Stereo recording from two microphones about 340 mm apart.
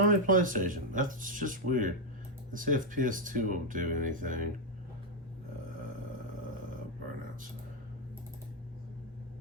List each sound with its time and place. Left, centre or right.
0.0 s speech: right